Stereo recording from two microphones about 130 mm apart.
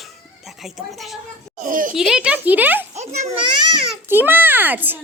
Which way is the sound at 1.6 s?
90° right.